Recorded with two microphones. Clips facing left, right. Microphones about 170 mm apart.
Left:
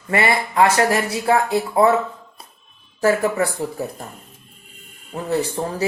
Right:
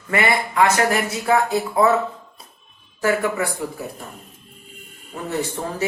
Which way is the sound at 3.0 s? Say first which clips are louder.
Left 3 dB; 35° left (ahead or behind).